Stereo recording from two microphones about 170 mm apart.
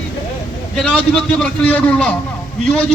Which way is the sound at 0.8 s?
5° left (ahead or behind).